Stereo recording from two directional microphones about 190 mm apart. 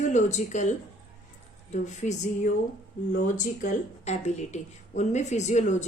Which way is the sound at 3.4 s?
40° left (ahead or behind).